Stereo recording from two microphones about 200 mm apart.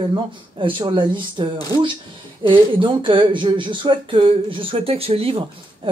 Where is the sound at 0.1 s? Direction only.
25° right (ahead or behind).